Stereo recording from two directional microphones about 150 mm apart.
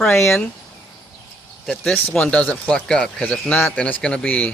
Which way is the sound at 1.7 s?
5° left (ahead or behind).